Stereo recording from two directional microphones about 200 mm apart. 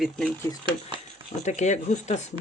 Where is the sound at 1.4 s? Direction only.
35° left (ahead or behind).